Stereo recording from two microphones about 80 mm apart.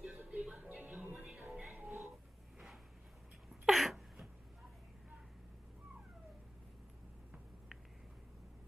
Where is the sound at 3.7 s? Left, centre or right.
Centre.